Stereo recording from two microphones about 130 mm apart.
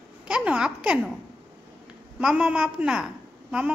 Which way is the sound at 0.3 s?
10° right (ahead or behind).